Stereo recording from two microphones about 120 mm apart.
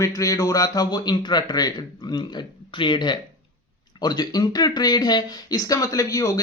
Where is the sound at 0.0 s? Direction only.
30° left (ahead or behind).